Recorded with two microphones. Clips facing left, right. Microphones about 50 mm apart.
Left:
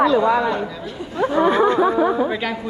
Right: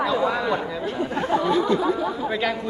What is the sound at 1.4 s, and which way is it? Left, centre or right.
Speech, left.